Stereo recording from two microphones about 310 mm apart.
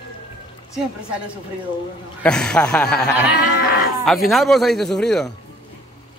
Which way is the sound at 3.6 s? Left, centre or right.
Left.